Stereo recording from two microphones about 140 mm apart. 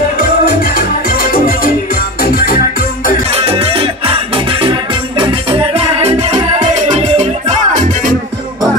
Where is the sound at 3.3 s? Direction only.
45° right (ahead or behind); by 8.1 s 65° right (ahead or behind).